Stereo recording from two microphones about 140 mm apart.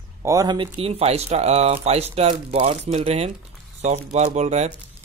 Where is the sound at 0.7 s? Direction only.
45° right (ahead or behind).